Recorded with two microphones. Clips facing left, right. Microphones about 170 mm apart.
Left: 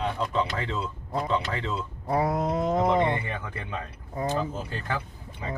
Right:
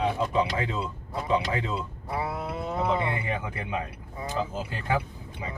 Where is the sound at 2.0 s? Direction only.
40° left (ahead or behind).